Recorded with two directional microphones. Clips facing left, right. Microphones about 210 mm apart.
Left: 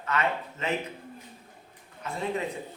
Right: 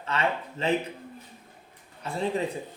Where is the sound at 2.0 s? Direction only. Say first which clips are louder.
Right 3 dB; 30° right (ahead or behind).